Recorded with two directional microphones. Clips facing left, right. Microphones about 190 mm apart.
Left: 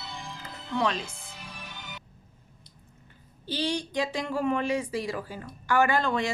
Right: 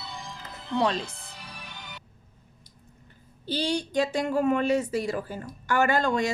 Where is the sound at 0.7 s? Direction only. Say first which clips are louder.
Right 2 dB; 35° right (ahead or behind).